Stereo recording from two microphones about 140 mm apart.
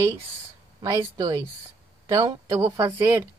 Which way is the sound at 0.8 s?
25° right (ahead or behind).